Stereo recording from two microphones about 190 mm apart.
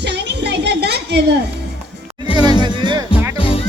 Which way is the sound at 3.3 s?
30° left (ahead or behind).